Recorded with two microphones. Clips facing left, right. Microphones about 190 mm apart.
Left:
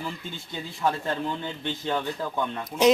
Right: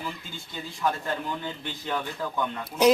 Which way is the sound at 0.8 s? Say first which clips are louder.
Left 2 dB; 25° left (ahead or behind).